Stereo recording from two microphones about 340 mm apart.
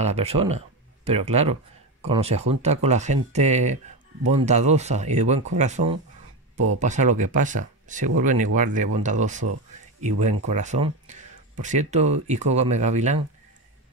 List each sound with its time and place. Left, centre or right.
0.0 s speech: centre